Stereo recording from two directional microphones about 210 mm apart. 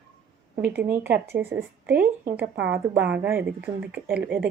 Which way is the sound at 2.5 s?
60° right (ahead or behind).